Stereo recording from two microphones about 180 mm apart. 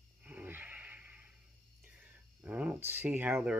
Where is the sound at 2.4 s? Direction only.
5° right (ahead or behind).